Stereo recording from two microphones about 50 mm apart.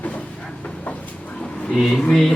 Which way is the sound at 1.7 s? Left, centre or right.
Centre.